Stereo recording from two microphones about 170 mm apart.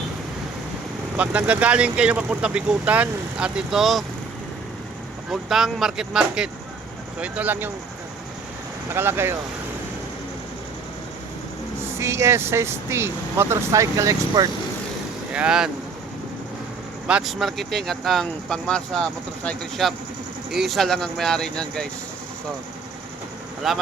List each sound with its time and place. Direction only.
1.1 s speech: 10° right (ahead or behind)
5.3 s speech: centre (ahead or behind)
9.0 s speech: 15° right (ahead or behind)
11.9 s speech: 15° right (ahead or behind)
15.3 s speech: 5° right (ahead or behind)
17.1 s speech: 5° right (ahead or behind)
23.6 s speech: centre (ahead or behind)